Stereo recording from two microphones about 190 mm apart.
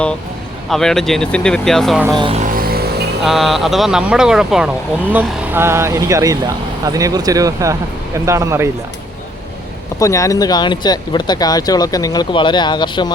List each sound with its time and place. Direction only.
0.7 s speech: centre (ahead or behind)
2.0 s music: 25° right (ahead or behind)
2.4 s music: 50° right (ahead or behind)
3.2 s speech: centre (ahead or behind)
10.0 s speech: 15° left (ahead or behind)